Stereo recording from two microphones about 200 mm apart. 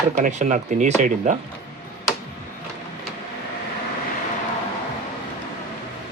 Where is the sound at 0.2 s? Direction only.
35° right (ahead or behind).